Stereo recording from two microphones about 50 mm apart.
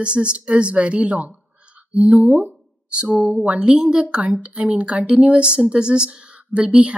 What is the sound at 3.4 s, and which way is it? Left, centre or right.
Speech, right.